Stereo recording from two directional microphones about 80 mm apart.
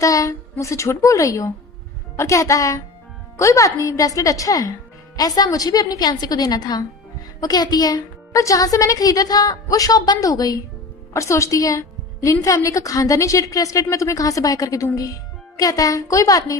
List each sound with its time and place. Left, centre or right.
0.0 s a sound: left
0.6 s speech: left
11.1 s a woman's voice: left